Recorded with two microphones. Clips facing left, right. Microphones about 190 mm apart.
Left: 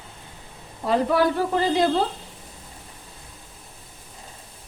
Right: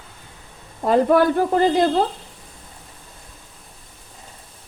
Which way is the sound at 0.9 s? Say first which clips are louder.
Right 5 dB; 50° right (ahead or behind).